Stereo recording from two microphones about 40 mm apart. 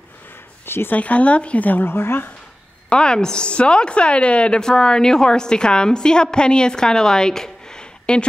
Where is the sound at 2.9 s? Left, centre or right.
Left.